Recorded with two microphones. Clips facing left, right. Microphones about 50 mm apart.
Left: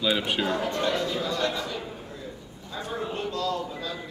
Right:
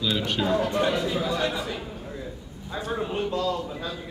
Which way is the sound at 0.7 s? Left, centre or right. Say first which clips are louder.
Right 2 dB; centre.